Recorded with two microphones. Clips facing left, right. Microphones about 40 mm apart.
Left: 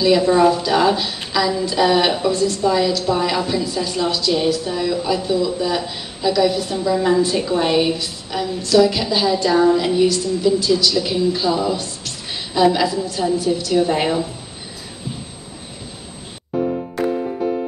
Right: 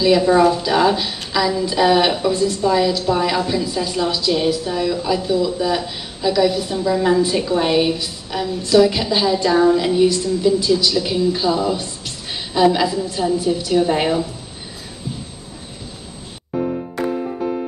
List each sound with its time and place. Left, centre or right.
0.0 s a woman's voice: centre
8.6 s a woman's voice: centre
9.5 s a woman's voice: centre
10.0 s a woman's voice: centre
11.0 s a woman's voice: centre
13.4 s a woman's voice: right
13.7 s speech: centre